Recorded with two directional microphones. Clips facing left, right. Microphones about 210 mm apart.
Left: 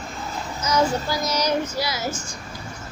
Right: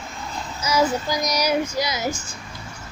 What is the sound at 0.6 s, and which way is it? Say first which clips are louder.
A child's voice: right 1 dB; 10° right (ahead or behind).